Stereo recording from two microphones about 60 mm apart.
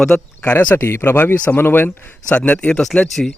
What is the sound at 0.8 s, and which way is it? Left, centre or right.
Speech, left.